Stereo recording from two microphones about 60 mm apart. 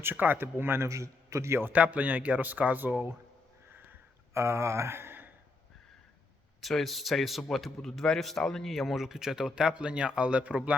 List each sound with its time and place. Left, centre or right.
0.0 s speech: right
0.9 s a man's voice: right
1.7 s a man's voice: right
4.4 s speech: right
6.6 s speech: centre; by 10.8 s right